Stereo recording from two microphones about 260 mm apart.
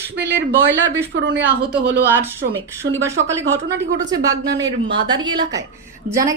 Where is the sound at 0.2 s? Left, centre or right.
Centre.